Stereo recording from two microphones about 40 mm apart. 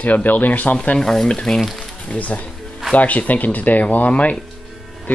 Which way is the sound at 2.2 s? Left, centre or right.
Left.